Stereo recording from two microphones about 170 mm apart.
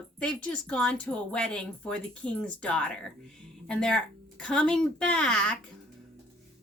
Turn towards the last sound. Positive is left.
turn(degrees=5)  # may be behind; listen again after turning